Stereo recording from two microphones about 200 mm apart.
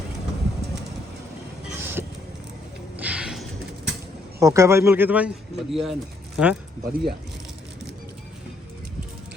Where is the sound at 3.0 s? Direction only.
5° right (ahead or behind).